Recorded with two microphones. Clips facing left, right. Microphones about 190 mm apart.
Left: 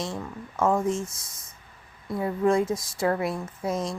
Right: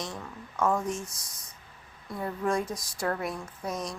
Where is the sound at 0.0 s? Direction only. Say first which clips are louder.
Left 5 dB; 25° left (ahead or behind).